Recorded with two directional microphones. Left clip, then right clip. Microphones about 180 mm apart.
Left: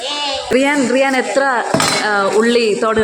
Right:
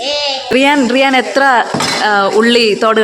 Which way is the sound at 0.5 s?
10° right (ahead or behind).